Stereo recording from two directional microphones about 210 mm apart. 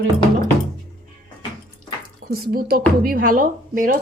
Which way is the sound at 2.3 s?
45° right (ahead or behind).